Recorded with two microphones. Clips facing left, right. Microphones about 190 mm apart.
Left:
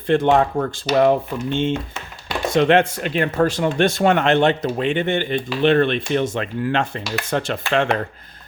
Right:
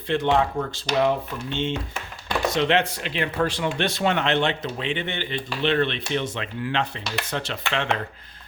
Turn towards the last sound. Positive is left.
turn(degrees=50)  # may be behind; listen again after turning